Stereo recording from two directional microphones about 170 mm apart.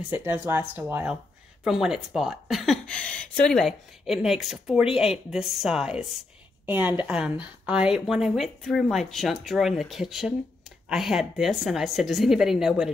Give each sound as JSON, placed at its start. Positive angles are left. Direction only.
{"t": 0.1, "sound": "a woman's voice", "side_deg": -10}